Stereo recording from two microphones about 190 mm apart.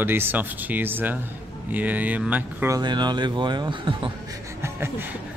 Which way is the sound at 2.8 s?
20° right (ahead or behind).